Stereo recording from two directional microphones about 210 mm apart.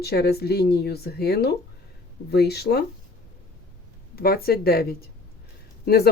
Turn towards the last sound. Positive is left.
turn(degrees=50)  # may be behind; listen again after turning